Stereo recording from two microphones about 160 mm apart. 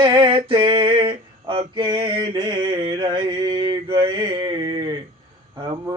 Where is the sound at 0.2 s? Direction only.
35° right (ahead or behind).